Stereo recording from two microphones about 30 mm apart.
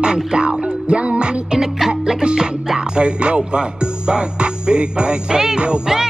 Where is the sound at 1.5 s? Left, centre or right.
Centre.